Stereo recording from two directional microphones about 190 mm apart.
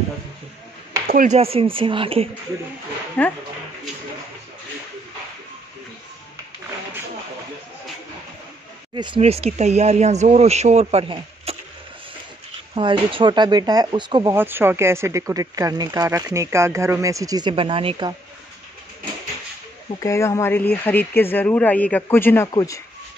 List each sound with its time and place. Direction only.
1.0 s speech: 45° right (ahead or behind); by 2.2 s 30° right (ahead or behind)
3.2 s speech: 5° left (ahead or behind)
8.9 s speech: 25° right (ahead or behind)
12.7 s speech: 25° right (ahead or behind)
14.3 s speech: 10° right (ahead or behind); by 18.1 s 25° right (ahead or behind)
20.0 s speech: 15° left (ahead or behind)